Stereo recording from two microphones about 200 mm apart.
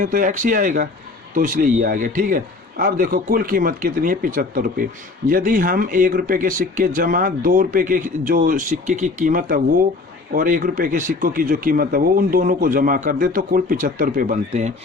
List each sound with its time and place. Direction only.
0.0 s speech: 40° right (ahead or behind)